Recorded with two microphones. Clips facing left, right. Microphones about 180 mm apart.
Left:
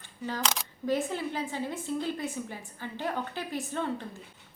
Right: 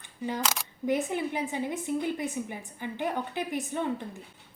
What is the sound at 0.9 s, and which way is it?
A woman's voice, 15° right (ahead or behind).